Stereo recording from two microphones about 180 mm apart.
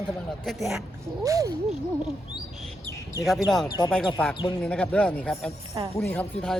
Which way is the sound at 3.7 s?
25° left (ahead or behind).